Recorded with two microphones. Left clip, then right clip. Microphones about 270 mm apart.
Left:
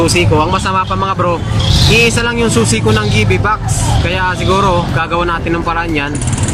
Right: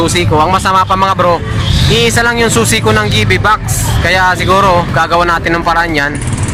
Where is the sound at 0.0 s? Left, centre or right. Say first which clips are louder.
Right 1 dB; centre.